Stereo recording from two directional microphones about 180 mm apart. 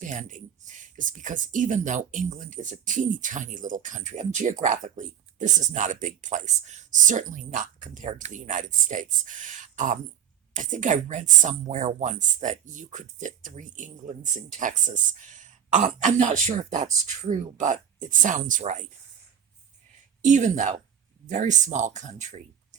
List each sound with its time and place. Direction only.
0.0 s speech: 45° right (ahead or behind)
20.2 s speech: 45° right (ahead or behind)